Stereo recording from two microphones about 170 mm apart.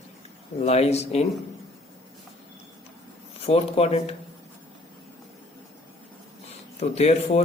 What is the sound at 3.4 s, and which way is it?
Speech, 35° left (ahead or behind).